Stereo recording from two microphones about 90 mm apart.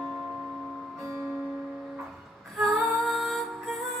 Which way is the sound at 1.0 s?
30° right (ahead or behind).